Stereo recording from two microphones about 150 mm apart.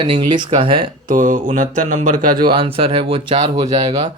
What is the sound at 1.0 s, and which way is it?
Speech, 60° right (ahead or behind).